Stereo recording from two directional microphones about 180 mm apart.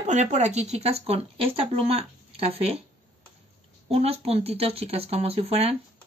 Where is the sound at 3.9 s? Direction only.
35° right (ahead or behind).